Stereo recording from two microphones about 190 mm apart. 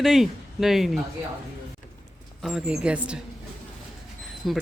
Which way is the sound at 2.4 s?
5° right (ahead or behind).